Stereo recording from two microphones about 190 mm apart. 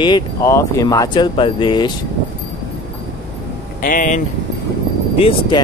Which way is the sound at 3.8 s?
45° left (ahead or behind).